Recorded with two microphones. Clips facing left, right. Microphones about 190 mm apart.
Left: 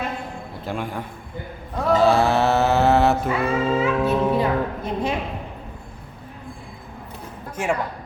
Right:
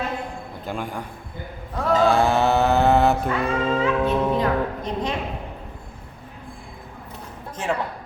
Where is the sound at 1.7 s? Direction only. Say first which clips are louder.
Left 1 dB; centre (ahead or behind).